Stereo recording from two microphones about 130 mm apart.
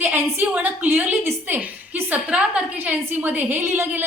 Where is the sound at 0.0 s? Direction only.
15° right (ahead or behind).